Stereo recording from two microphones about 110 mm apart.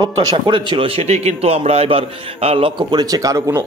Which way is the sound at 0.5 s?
50° right (ahead or behind).